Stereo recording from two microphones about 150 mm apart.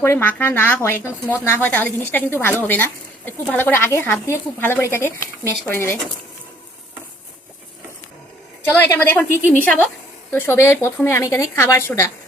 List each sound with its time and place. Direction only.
0.0 s speech: 15° left (ahead or behind)
8.7 s a woman's voice: 10° left (ahead or behind)